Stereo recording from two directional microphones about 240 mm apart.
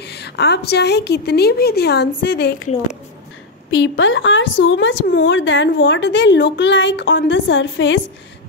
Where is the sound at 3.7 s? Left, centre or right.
Left.